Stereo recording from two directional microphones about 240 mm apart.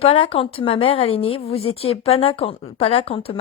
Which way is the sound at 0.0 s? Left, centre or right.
Left.